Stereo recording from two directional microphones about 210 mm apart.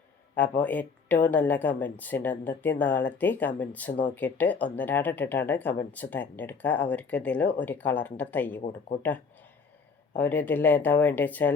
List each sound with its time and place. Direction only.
0.6 s speech: 5° left (ahead or behind)
10.2 s speech: 10° left (ahead or behind)